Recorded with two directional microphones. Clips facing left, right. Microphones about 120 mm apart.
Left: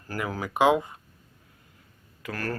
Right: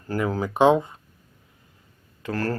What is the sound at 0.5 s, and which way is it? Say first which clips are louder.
Speech: right 3 dB; 10° left (ahead or behind).